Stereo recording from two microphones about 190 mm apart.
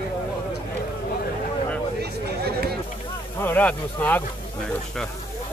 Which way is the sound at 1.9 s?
55° right (ahead or behind).